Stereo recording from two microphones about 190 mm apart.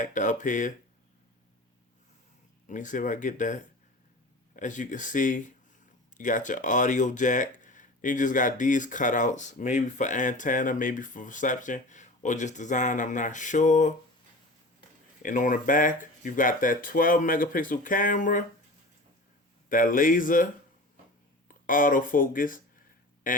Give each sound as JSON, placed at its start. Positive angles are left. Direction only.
{"t": 0.0, "sound": "speech", "side_deg": 40}
{"t": 2.6, "sound": "speech", "side_deg": 40}
{"t": 19.6, "sound": "speech", "side_deg": 45}